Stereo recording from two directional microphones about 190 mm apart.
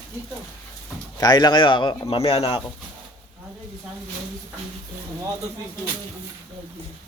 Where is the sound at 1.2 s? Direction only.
20° left (ahead or behind).